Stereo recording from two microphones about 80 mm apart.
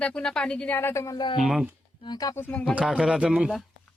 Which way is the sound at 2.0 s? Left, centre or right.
Left.